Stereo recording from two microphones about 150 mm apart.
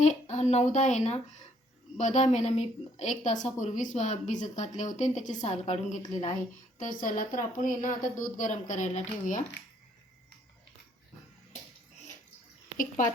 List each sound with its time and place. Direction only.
0.0 s a woman's voice: 50° left (ahead or behind)
6.7 s a woman's voice: 60° left (ahead or behind)
12.7 s a woman's voice: 60° left (ahead or behind)